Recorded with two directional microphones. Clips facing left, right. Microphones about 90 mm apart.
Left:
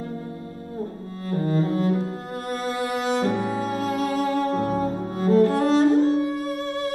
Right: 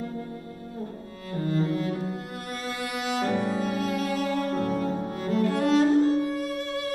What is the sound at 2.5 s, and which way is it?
Music, 35° left (ahead or behind).